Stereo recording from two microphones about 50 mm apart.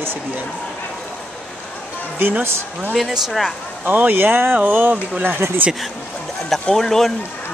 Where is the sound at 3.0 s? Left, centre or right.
Centre.